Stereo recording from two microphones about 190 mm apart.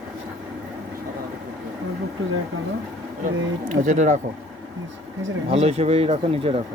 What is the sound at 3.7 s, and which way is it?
Speech, 40° right (ahead or behind).